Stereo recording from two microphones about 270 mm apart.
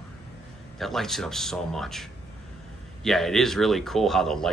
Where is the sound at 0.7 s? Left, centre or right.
Centre.